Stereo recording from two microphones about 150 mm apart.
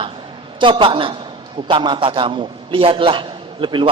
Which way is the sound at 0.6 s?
35° right (ahead or behind).